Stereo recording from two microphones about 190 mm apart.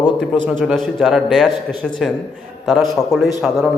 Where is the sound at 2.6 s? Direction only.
Centre (ahead or behind).